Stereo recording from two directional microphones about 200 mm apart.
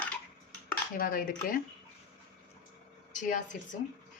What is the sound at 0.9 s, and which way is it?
Speech, 45° left (ahead or behind).